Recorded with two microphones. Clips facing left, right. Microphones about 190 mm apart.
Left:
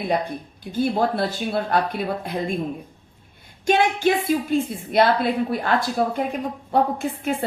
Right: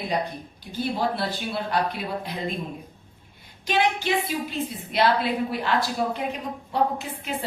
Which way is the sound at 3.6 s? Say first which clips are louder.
Left 5 dB; 50° left (ahead or behind).